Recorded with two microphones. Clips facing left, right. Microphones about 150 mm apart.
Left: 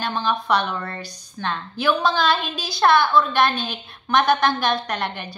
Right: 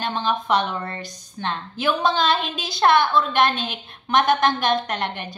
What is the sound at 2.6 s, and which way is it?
Speech, 50° right (ahead or behind).